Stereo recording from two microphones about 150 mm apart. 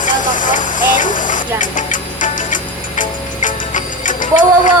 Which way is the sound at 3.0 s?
60° left (ahead or behind).